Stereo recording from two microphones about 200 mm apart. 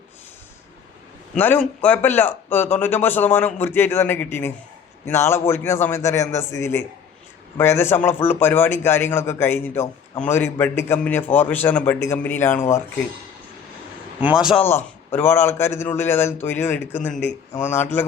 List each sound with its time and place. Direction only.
1.4 s speech: 10° left (ahead or behind)
14.2 s a man's voice: 5° right (ahead or behind)
14.6 s speech: 10° left (ahead or behind)